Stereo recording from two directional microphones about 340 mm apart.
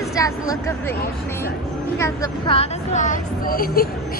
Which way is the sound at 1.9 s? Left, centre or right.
Centre.